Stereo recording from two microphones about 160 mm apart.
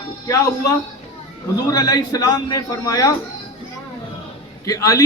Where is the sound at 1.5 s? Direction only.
25° left (ahead or behind).